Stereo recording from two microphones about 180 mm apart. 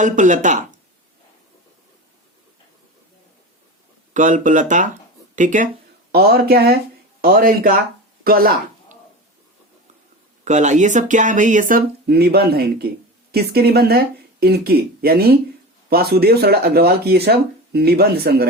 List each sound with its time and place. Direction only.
0.0 s speech: 45° right (ahead or behind)
4.1 s speech: 45° right (ahead or behind)
6.1 s speech: 60° right (ahead or behind)
10.4 s speech: 40° right (ahead or behind)
12.0 s speech: 60° right (ahead or behind)